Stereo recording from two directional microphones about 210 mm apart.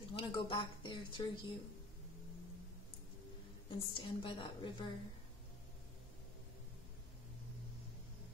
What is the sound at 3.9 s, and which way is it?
Speech, 25° left (ahead or behind).